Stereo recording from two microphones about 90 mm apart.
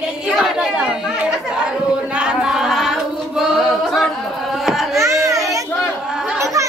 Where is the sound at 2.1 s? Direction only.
10° right (ahead or behind).